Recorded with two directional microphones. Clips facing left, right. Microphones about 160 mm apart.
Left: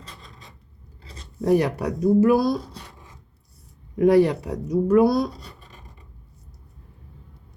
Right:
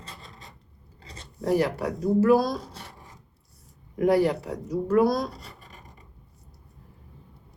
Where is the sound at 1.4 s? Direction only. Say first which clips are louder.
Left 4 dB; 20° left (ahead or behind).